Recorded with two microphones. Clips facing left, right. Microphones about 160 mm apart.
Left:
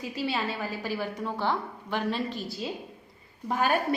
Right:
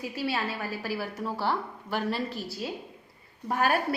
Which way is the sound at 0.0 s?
5° right (ahead or behind).